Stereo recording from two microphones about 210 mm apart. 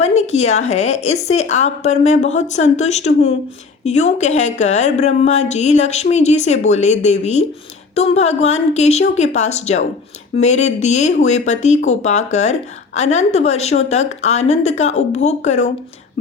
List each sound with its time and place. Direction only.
0.0 s speech: 30° left (ahead or behind)